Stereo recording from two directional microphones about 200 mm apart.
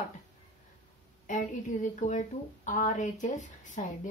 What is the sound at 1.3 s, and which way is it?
Speech, 40° left (ahead or behind).